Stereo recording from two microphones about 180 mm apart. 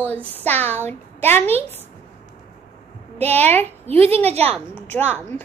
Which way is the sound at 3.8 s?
35° right (ahead or behind).